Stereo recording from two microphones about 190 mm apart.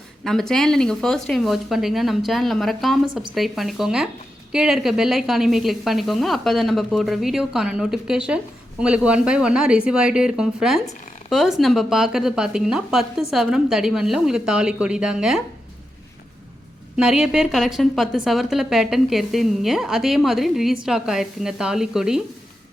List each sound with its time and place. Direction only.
0.3 s a woman's voice: centre (ahead or behind)
17.0 s a woman's voice: 5° right (ahead or behind)